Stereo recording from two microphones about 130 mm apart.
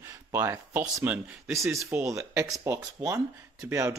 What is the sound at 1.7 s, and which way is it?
Speech, 25° right (ahead or behind).